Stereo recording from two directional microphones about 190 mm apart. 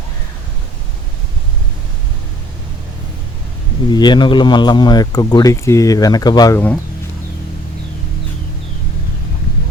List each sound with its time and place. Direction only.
3.8 s speech: 25° left (ahead or behind)